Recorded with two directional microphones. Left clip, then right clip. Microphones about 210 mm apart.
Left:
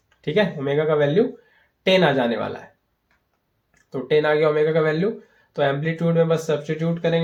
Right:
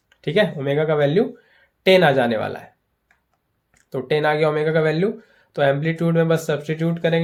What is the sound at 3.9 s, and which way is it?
Speech, 45° right (ahead or behind).